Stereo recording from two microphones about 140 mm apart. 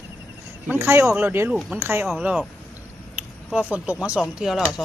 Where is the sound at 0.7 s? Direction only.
20° right (ahead or behind).